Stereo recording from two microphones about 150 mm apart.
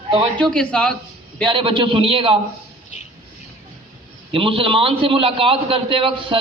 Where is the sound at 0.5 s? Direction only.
5° left (ahead or behind).